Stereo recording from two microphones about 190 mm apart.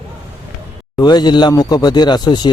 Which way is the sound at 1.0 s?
20° left (ahead or behind).